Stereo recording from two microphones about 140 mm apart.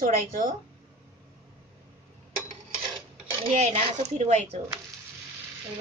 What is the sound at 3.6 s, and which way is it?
Speech, 50° right (ahead or behind).